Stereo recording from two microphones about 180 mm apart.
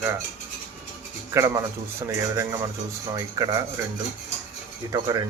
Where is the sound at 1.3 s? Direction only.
15° right (ahead or behind).